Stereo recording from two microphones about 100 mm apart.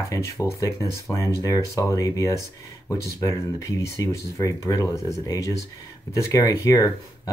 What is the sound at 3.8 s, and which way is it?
Speech, 35° left (ahead or behind).